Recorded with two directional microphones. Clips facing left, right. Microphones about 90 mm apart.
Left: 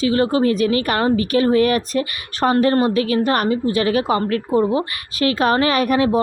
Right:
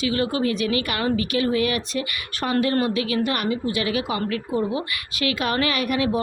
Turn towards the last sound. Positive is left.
turn(degrees=35)  # may be behind; listen again after turning